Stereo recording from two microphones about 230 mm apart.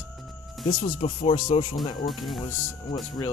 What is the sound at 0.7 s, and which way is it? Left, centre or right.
Speech, left.